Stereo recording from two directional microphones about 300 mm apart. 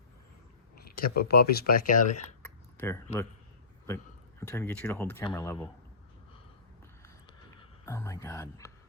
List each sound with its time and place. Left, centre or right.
0.8 s speech: left
2.7 s a man's voice: centre
7.6 s speech: centre